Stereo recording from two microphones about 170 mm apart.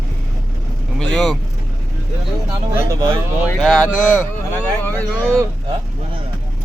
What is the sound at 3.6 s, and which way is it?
Speech, centre (ahead or behind).